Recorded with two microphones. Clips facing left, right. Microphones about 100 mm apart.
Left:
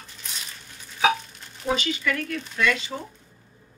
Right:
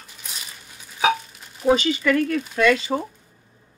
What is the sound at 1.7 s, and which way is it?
Speech, 40° right (ahead or behind).